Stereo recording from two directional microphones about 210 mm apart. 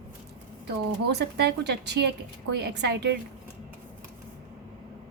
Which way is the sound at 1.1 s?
55° right (ahead or behind).